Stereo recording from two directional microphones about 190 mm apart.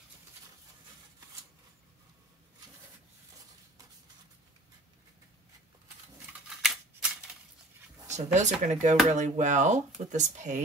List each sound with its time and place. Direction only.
6.6 s typewriter: centre (ahead or behind)
8.1 s speech: 40° right (ahead or behind)